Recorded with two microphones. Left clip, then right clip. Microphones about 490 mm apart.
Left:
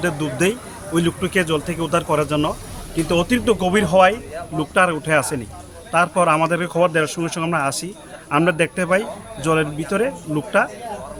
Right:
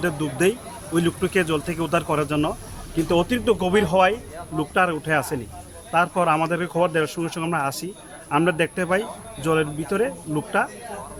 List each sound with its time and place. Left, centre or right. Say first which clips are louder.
0.0 s a man's voice: left 2 dB; right